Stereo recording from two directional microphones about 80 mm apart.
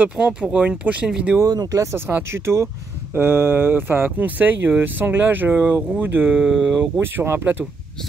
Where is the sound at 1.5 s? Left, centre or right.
Right.